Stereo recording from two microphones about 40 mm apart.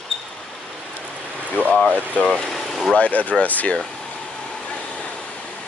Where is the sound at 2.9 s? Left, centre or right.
Left.